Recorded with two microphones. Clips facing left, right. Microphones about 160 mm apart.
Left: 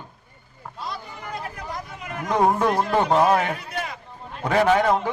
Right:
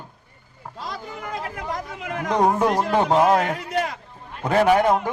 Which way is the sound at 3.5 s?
90° right.